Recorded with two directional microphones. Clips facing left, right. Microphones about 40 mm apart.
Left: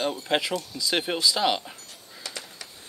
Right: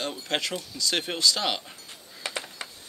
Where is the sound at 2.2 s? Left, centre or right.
Right.